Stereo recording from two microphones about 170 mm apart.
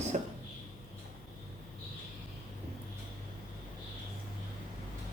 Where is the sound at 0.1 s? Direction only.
45° right (ahead or behind).